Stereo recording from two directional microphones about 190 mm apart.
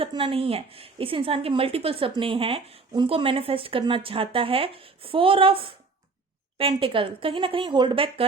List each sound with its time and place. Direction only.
0.0 s speech: 25° right (ahead or behind)